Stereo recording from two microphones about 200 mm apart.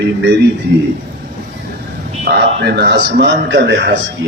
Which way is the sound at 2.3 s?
55° right (ahead or behind).